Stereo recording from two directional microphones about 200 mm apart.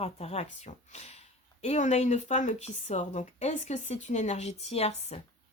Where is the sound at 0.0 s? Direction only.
30° left (ahead or behind).